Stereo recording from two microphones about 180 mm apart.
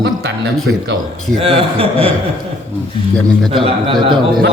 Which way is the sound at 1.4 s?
30° right (ahead or behind).